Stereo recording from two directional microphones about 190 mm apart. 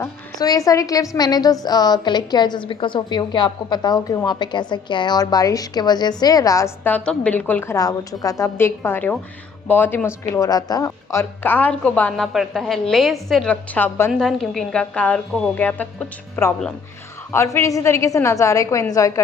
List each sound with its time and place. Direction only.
0.0 s a woman's voice: 20° left (ahead or behind)